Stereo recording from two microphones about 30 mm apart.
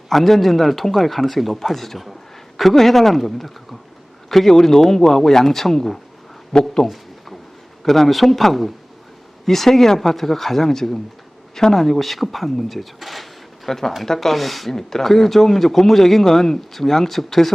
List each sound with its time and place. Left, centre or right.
0.1 s speech: centre
6.5 s speech: left
6.8 s a sound: centre
7.9 s speech: centre
13.7 s speech: centre